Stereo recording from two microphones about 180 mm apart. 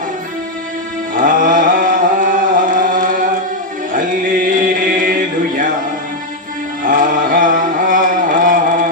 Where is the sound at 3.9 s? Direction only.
50° right (ahead or behind).